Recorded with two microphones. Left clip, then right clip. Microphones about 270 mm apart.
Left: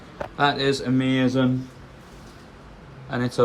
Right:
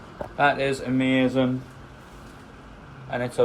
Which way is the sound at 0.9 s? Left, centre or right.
Left.